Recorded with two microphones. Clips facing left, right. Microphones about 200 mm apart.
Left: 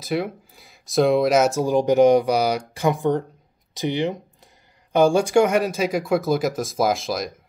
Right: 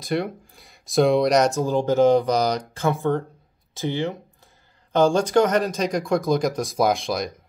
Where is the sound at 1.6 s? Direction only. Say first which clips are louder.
Left 2 dB; 15° left (ahead or behind).